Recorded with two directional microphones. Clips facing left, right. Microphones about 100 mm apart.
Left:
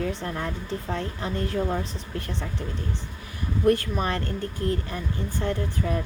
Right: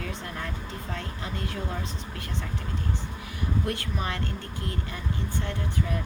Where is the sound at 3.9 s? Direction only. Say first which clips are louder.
Left 5 dB; 40° left (ahead or behind).